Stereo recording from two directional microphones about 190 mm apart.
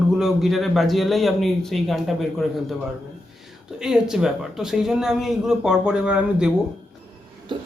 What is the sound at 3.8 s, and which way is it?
Speech, 5° right (ahead or behind).